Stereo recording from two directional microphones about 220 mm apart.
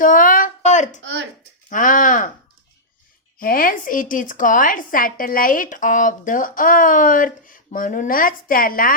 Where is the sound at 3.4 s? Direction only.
40° left (ahead or behind).